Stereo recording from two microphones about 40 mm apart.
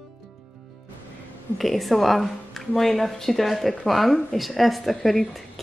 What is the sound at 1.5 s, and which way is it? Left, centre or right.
Speech, centre.